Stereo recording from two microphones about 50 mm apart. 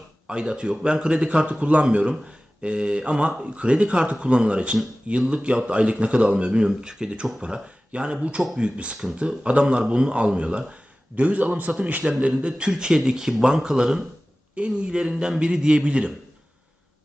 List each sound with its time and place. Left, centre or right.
0.3 s a man's voice: centre